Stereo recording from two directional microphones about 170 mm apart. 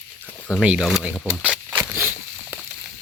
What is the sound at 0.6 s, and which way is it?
Speech, 5° right (ahead or behind).